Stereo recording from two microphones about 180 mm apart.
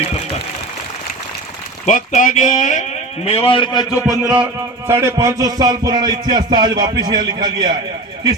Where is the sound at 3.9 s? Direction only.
5° right (ahead or behind).